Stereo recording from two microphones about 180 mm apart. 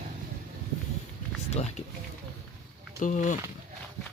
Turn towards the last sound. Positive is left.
turn(degrees=45)  # may be behind; listen again after turning